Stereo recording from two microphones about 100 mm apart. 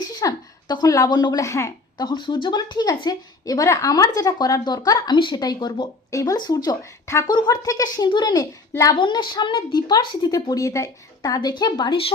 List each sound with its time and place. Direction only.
0.2 s a woman's voice: 40° left (ahead or behind)
2.0 s speech: 50° left (ahead or behind)
6.1 s speech: 30° left (ahead or behind)
6.3 s a woman's voice: 45° left (ahead or behind)
9.0 s speech: 50° left (ahead or behind); by 11.3 s 35° left (ahead or behind)
11.3 s speech: 45° left (ahead or behind)